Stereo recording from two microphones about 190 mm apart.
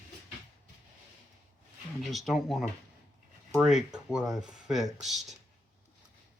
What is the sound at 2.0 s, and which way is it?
Speech, centre (ahead or behind).